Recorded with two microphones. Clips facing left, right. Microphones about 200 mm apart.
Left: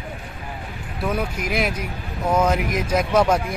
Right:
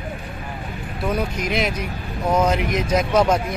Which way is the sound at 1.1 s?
5° left (ahead or behind).